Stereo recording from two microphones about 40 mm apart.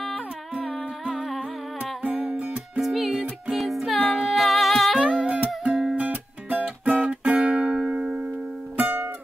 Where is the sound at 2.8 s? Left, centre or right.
Centre.